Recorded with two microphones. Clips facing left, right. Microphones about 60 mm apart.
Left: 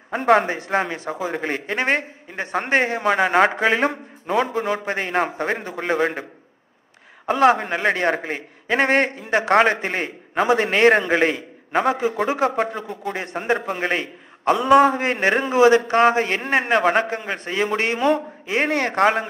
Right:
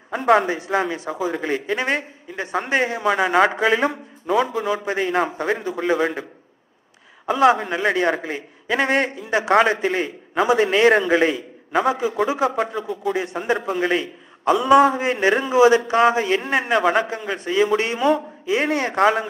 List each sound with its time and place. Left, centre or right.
0.1 s a man's voice: left
7.2 s a man's voice: left
12.8 s a man's voice: left